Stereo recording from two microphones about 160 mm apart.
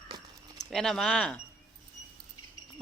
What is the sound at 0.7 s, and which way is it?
Speech, centre (ahead or behind).